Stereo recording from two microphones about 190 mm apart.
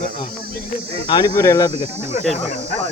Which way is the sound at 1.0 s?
20° left (ahead or behind).